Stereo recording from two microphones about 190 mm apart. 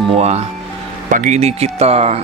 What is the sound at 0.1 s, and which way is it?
Speech, 35° right (ahead or behind).